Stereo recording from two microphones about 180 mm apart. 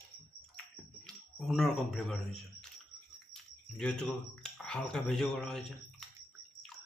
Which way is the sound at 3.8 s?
5° left (ahead or behind).